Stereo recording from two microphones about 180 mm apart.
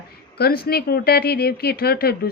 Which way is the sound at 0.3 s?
60° left (ahead or behind).